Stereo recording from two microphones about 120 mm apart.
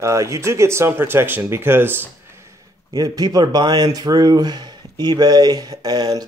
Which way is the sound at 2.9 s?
30° right (ahead or behind).